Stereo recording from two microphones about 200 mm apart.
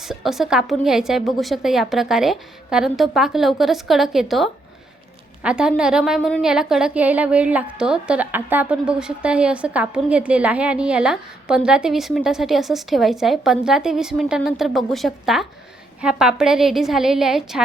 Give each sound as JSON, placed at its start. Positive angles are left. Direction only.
{"t": 0.0, "sound": "a woman's voice", "side_deg": 0}